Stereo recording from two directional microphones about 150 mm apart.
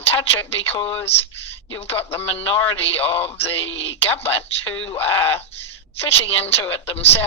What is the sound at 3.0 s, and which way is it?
Speech, 40° left (ahead or behind).